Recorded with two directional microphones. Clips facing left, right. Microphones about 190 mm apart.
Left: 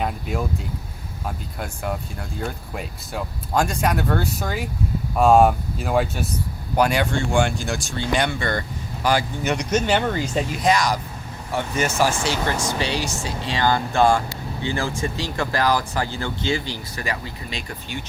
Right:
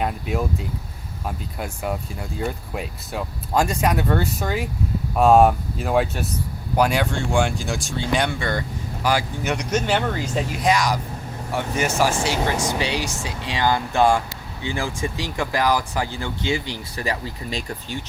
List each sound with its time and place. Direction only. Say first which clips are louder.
0.0 s speech: right 1 dB; centre (ahead or behind)
1.5 s speech: right 1 dB; 5° right (ahead or behind)
8.3 s speech: even; 10° right (ahead or behind)
16.9 s speech: right 4 dB; 35° right (ahead or behind)